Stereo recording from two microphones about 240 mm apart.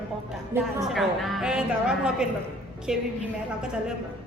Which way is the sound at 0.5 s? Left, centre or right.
Centre.